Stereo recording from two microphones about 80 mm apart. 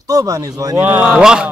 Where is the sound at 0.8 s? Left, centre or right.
Centre.